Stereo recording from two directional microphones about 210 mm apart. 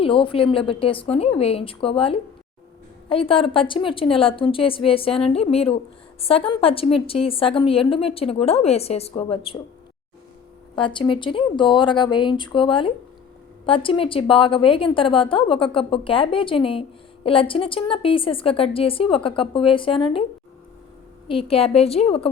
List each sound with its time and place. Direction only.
0.0 s a woman's voice: 25° left (ahead or behind)
10.8 s a woman's voice: 25° left (ahead or behind)
21.2 s a woman's voice: 25° left (ahead or behind)